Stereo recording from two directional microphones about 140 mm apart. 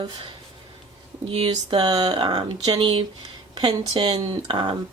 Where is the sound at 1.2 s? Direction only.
40° right (ahead or behind).